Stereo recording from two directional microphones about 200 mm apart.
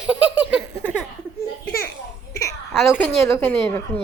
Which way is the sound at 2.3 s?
15° left (ahead or behind).